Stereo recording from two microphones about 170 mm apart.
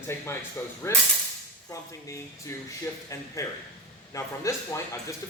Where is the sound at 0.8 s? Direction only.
15° left (ahead or behind).